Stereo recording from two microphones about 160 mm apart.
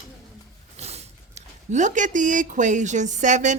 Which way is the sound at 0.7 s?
40° right (ahead or behind).